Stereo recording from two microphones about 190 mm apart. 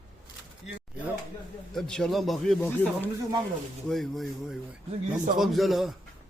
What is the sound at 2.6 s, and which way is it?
Speech, 10° left (ahead or behind).